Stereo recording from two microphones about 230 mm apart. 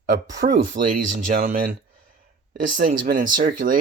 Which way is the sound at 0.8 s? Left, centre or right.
Right.